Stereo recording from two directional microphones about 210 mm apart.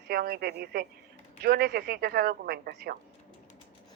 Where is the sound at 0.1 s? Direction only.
45° right (ahead or behind).